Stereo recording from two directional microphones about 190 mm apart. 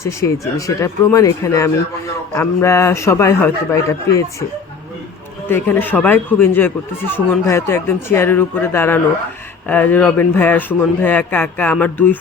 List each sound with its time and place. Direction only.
0.0 s speech: 15° left (ahead or behind)
5.5 s speech: 10° left (ahead or behind)